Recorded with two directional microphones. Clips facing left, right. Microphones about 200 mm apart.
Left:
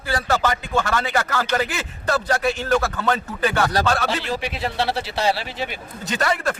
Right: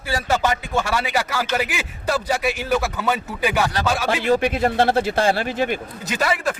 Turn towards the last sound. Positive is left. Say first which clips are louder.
# even
turn(degrees=-5)  # may be behind; listen again after turning